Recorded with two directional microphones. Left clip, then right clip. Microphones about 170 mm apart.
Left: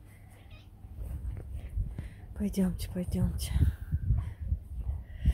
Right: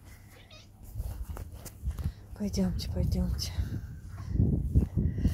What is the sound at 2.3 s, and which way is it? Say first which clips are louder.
Speech: even; 20° left (ahead or behind).